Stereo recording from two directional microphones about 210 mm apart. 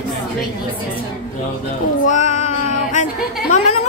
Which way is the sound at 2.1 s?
35° left (ahead or behind).